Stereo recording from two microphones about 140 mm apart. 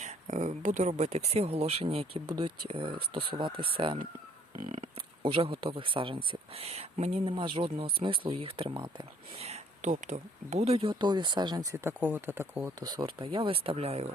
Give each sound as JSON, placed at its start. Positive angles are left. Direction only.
{"t": 0.0, "sound": "speech", "side_deg": -60}
{"t": 2.2, "sound": "speech", "side_deg": -30}
{"t": 2.6, "sound": "speech", "side_deg": -40}
{"t": 4.5, "sound": "a sound", "side_deg": -65}
{"t": 4.8, "sound": "speech", "side_deg": -40}
{"t": 7.3, "sound": "speech", "side_deg": -35}
{"t": 9.4, "sound": "speech", "side_deg": -55}
{"t": 12.8, "sound": "speech", "side_deg": -30}